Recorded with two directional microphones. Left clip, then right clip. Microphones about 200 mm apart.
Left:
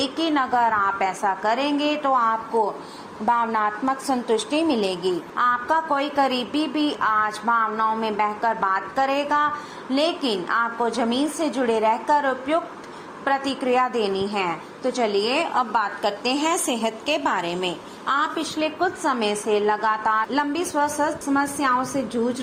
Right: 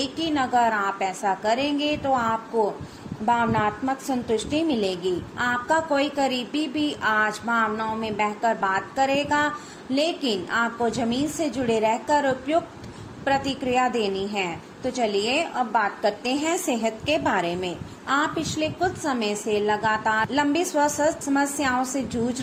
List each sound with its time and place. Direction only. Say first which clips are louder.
0.0 s a woman's voice: left 3 dB; 15° right (ahead or behind)